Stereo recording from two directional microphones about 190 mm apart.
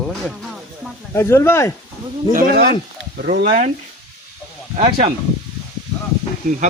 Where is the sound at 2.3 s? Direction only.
50° right (ahead or behind).